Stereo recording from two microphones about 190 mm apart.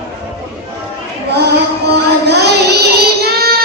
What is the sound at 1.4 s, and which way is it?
Child singing, 60° right (ahead or behind).